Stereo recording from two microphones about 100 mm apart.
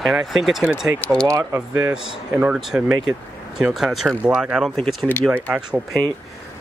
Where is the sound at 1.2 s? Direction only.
30° right (ahead or behind).